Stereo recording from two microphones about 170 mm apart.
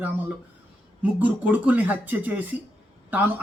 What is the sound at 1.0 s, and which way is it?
Speech, 10° right (ahead or behind).